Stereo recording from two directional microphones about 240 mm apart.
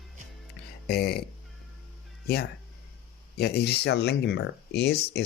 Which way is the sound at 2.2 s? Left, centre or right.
Left.